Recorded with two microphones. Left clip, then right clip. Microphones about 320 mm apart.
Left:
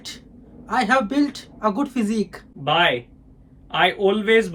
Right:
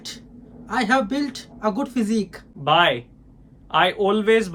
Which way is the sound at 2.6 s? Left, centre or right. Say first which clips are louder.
Right 1 dB; centre.